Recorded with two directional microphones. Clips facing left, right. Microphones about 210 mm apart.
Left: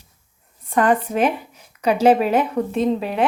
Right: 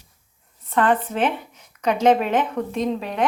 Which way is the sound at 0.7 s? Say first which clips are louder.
Left 2 dB; 10° left (ahead or behind).